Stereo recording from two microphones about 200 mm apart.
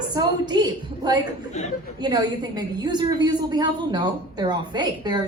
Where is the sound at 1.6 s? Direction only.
35° left (ahead or behind).